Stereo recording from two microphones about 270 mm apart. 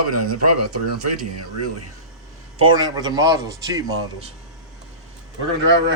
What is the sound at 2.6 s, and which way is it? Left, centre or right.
Speech, centre.